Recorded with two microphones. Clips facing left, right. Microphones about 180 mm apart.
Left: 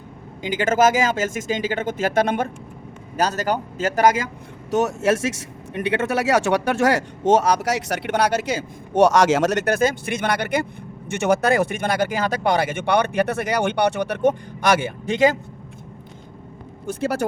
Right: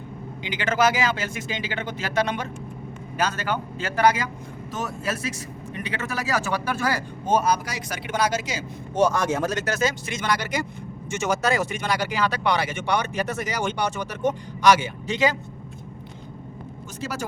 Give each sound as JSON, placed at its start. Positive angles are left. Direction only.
{"t": 0.4, "sound": "speech", "side_deg": 45}
{"t": 3.2, "sound": "speech", "side_deg": 40}
{"t": 4.7, "sound": "speech", "side_deg": 75}
{"t": 16.8, "sound": "speech", "side_deg": 55}